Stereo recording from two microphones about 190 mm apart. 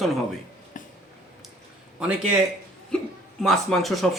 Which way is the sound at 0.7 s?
45° left (ahead or behind).